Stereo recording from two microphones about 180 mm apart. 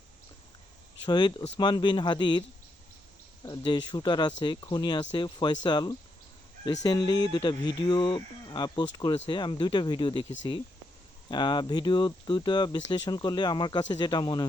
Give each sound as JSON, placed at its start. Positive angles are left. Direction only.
{"t": 1.0, "sound": "speech", "side_deg": 25}
{"t": 3.4, "sound": "speech", "side_deg": 25}